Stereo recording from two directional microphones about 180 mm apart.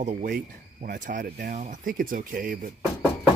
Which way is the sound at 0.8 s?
45° right (ahead or behind).